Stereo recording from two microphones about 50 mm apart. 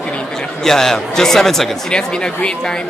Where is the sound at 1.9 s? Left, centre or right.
Centre.